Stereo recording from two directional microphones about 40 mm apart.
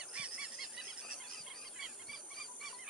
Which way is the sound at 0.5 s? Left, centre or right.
Centre.